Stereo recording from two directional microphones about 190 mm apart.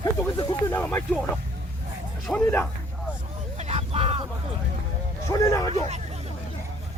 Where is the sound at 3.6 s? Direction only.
30° right (ahead or behind).